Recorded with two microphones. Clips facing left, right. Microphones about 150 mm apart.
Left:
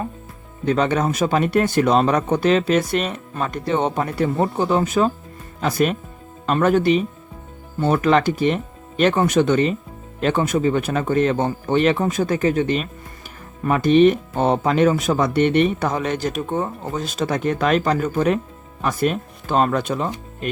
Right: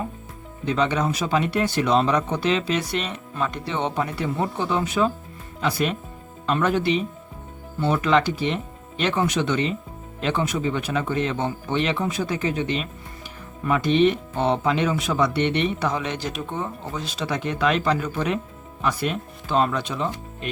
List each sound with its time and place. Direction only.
0.6 s speech: 50° left (ahead or behind)